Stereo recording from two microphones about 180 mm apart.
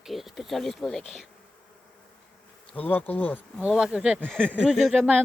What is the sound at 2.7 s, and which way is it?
Bee, 10° left (ahead or behind).